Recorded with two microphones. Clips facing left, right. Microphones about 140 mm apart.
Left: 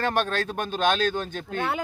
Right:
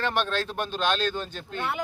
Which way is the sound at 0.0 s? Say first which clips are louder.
Left 2 dB; 45° left (ahead or behind).